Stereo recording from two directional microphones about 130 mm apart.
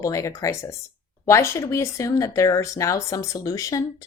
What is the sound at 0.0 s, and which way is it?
Speech, 25° left (ahead or behind).